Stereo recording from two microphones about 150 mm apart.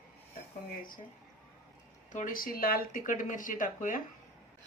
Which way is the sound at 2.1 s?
60° left (ahead or behind).